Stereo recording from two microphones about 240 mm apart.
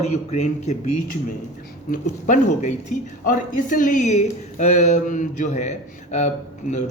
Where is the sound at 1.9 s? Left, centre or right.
Left.